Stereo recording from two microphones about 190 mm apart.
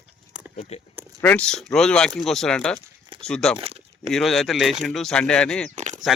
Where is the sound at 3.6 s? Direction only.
30° right (ahead or behind).